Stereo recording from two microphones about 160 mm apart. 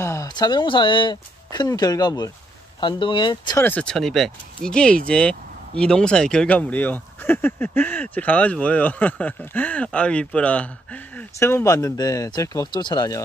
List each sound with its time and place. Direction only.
0.0 s speech: 20° left (ahead or behind)
3.5 s speech: 10° left (ahead or behind)